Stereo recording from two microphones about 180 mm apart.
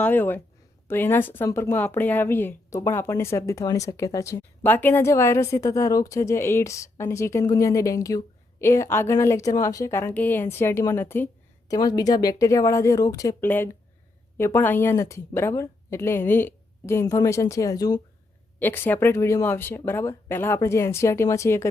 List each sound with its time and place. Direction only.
0.0 s speech: 10° left (ahead or behind)